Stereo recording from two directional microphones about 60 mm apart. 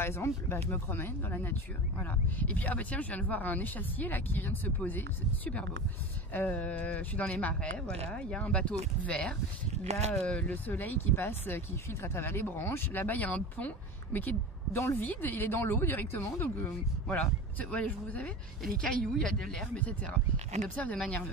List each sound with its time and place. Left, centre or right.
0.0 s speech: left; by 10.5 s centre
10.5 s speech: left
14.7 s a woman's voice: left
15.0 s speech: left
18.8 s speech: centre
19.8 s speech: left